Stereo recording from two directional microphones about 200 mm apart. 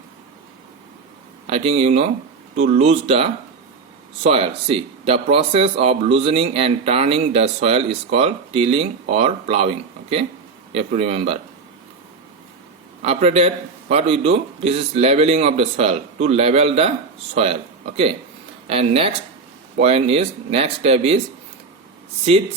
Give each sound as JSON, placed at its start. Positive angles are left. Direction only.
{"t": 1.5, "sound": "a man's voice", "side_deg": -30}
{"t": 13.0, "sound": "a man's voice", "side_deg": -30}